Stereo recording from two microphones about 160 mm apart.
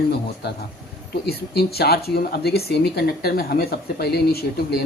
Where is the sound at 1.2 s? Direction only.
80° left.